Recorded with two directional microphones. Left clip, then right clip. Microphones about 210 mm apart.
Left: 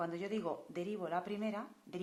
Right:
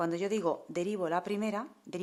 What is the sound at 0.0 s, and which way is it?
Speech, 40° right (ahead or behind).